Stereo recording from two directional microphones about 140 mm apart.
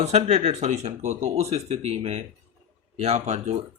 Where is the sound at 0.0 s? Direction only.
50° right (ahead or behind).